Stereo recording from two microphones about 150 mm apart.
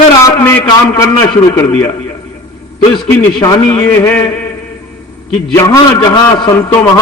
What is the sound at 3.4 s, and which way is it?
Speech, 25° left (ahead or behind).